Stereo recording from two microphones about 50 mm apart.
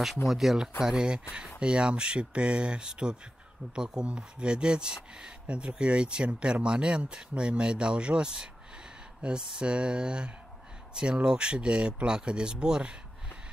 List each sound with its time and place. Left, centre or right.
0.3 s speech: centre